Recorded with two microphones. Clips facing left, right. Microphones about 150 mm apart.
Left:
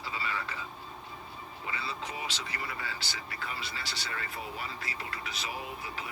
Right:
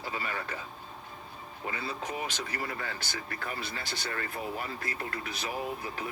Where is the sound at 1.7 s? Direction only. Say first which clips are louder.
Right 3 dB; 50° right (ahead or behind).